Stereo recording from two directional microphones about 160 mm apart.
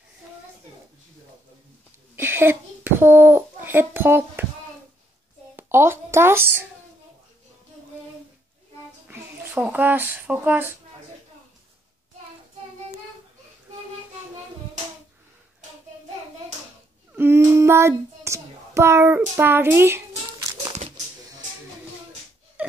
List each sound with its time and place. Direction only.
2.1 s a child's voice: 15° right (ahead or behind)
5.6 s speech: 15° right (ahead or behind)
9.0 s speech: 15° right (ahead or behind)
17.1 s child singing: 15° right (ahead or behind)
22.6 s a sound: 10° right (ahead or behind)